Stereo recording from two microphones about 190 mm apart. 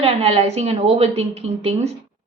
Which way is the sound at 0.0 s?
35° right (ahead or behind).